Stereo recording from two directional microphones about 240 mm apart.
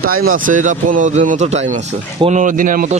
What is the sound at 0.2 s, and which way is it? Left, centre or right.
A man's voice, right.